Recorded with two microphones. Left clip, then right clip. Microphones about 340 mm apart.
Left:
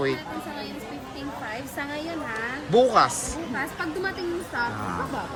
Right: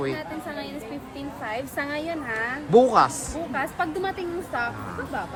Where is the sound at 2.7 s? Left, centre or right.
Centre.